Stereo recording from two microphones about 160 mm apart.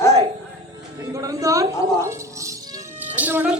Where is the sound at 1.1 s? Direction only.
20° right (ahead or behind).